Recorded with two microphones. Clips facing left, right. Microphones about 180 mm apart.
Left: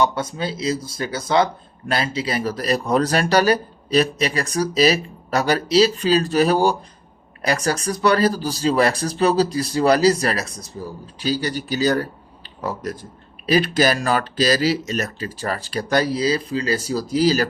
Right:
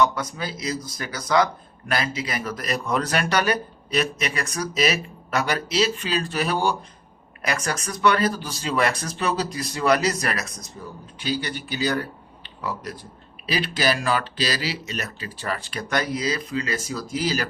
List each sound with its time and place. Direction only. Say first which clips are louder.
0.0 s a man's voice: left 2 dB; 25° left (ahead or behind)